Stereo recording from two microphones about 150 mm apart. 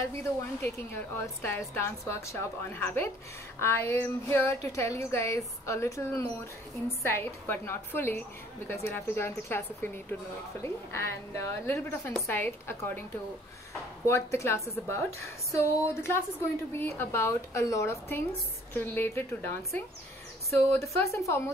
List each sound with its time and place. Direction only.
0.1 s a woman's voice: 20° left (ahead or behind)
14.0 s a woman's voice: 20° left (ahead or behind)